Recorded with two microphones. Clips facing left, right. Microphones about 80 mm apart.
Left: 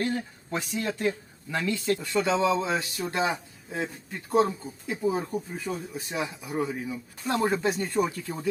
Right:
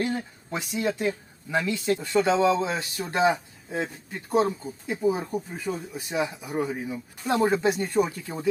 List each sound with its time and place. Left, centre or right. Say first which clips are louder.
0.5 s speech: right 2 dB; centre